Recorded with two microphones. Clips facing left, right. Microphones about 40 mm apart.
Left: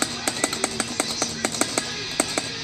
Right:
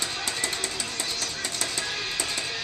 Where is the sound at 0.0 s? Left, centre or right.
Left.